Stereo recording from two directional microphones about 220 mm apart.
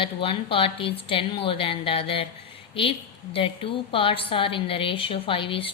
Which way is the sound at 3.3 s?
25° left (ahead or behind).